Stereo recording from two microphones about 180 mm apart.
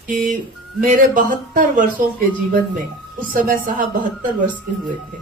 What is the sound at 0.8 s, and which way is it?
A man's voice, 45° right (ahead or behind).